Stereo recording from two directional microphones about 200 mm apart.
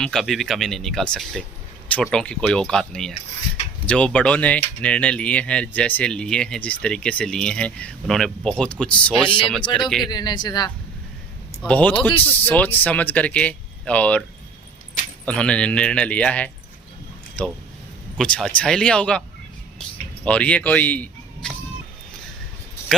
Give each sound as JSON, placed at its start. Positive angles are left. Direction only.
{"t": 0.0, "sound": "speech", "side_deg": 0}
{"t": 10.1, "sound": "speech", "side_deg": 20}
{"t": 11.6, "sound": "speech", "side_deg": 5}
{"t": 20.2, "sound": "speech", "side_deg": 5}